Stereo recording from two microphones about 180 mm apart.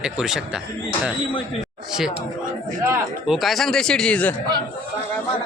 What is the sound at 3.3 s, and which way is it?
Speech, centre (ahead or behind).